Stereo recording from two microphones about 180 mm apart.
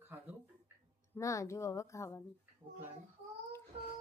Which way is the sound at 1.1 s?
15° left (ahead or behind).